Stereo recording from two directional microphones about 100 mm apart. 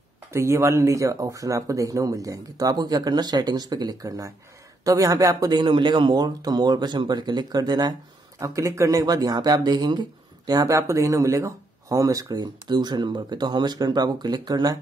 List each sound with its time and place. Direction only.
0.3 s speech: 30° right (ahead or behind); by 7.9 s 45° right (ahead or behind)
8.4 s speech: 30° right (ahead or behind)